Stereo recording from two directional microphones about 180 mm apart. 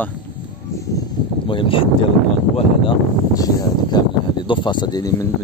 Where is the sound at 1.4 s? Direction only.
30° left (ahead or behind).